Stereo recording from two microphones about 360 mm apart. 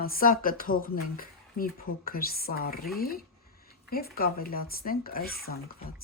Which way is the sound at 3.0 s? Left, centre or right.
Left.